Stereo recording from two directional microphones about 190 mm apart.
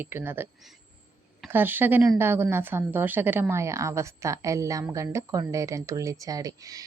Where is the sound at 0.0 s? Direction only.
10° right (ahead or behind).